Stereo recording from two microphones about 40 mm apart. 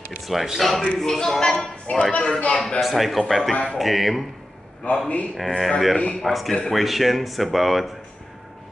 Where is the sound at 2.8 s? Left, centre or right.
Centre.